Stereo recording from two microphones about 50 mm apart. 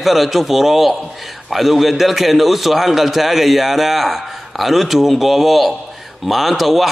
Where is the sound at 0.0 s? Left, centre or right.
Centre.